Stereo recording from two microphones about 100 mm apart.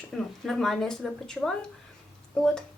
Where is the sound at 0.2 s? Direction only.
5° left (ahead or behind).